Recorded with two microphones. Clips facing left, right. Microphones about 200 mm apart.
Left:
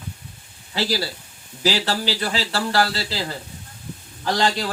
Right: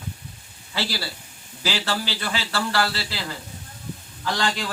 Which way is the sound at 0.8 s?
40° left (ahead or behind).